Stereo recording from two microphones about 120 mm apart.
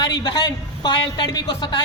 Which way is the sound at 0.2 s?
35° left (ahead or behind).